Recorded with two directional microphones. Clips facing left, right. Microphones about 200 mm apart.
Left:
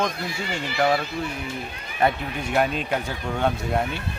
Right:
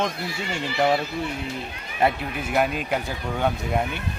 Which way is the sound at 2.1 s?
5° right (ahead or behind).